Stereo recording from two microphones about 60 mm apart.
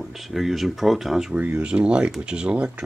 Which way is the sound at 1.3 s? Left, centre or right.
Right.